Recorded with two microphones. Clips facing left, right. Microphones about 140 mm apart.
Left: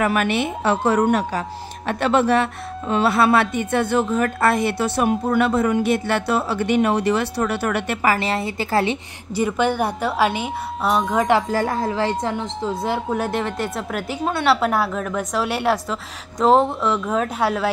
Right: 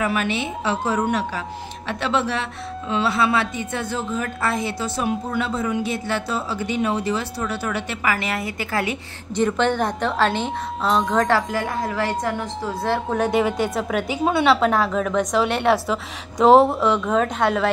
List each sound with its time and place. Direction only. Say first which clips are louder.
0.0 s speech: left 3 dB; 55° left (ahead or behind)
8.0 s speech: left 3 dB; 35° left (ahead or behind)
9.3 s a woman's voice: even; 10° left (ahead or behind)
11.5 s speech: left 3 dB; 35° left (ahead or behind); by 13.0 s 20° left (ahead or behind)
13.1 s a woman's voice: right 3 dB; centre (ahead or behind)